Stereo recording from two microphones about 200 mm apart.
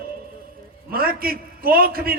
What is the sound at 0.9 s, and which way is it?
A man's voice, 45° right (ahead or behind).